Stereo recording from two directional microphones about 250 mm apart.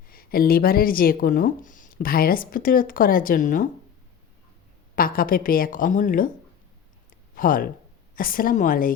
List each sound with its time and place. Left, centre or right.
0.1 s speech: left
4.9 s speech: left
7.1 s a sound: left
8.1 s speech: left